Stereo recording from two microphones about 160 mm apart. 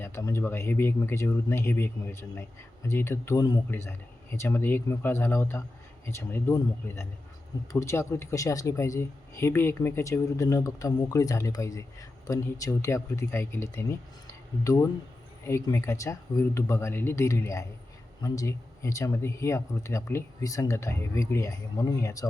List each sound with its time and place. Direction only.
0.0 s a man's voice: 20° left (ahead or behind)